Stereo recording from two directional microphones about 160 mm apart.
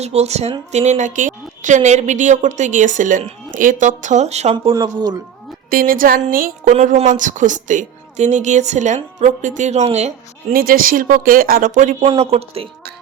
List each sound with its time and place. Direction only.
0.0 s a woman's voice: 40° right (ahead or behind)
4.7 s speech: 25° right (ahead or behind)
5.7 s a woman's voice: 60° right (ahead or behind); by 10.1 s 45° right (ahead or behind)
10.5 s speech: 65° right (ahead or behind)
12.0 s speech: 40° right (ahead or behind)